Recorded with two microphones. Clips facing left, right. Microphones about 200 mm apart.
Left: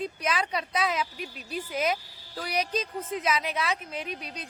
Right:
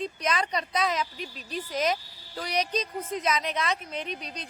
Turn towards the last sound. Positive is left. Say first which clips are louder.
# right 1 dB
turn(degrees=5)  # may be behind; listen again after turning